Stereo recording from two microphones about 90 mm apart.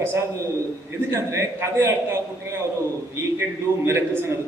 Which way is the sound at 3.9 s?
30° right (ahead or behind).